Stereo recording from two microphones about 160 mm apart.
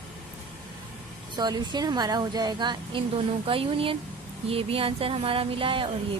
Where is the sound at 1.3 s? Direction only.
25° right (ahead or behind).